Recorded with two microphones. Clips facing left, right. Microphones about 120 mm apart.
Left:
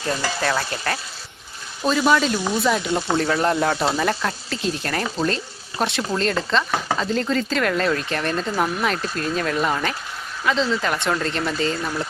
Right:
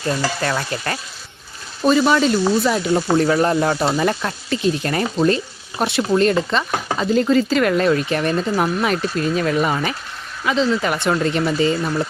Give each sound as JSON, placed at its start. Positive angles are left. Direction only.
{"t": 0.4, "sound": "speech", "side_deg": 0}